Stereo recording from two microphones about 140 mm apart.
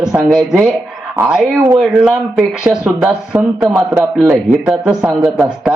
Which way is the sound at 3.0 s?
15° right (ahead or behind).